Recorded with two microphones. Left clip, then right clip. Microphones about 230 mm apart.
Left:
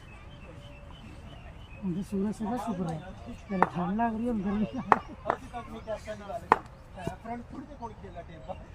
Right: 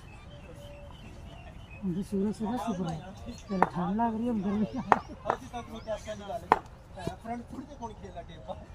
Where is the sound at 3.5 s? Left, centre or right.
Centre.